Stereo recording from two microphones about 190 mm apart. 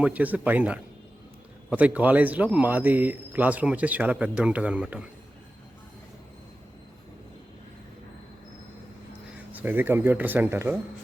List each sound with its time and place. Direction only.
0.0 s speech: 10° right (ahead or behind)
9.5 s speech: 10° right (ahead or behind)